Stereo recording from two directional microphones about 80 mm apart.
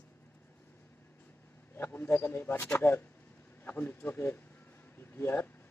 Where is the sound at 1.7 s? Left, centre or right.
Left.